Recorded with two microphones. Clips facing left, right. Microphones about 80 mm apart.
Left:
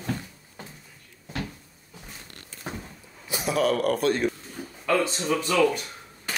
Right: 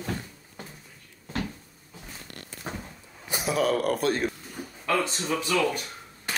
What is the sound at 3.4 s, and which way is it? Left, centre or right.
Speech, centre.